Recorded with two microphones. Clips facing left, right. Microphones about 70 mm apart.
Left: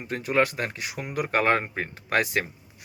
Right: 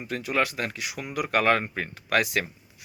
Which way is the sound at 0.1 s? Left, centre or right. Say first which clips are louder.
Left 3 dB; left.